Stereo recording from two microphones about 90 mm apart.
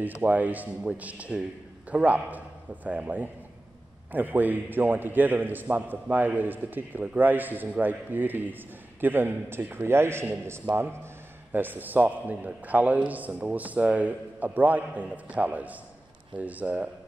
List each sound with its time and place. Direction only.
0.0 s a man's voice: 20° right (ahead or behind)